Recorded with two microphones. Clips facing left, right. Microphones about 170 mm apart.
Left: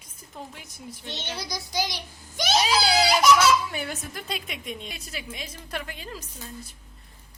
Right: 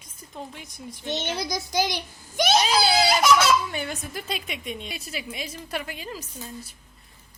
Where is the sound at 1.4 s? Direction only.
50° right (ahead or behind).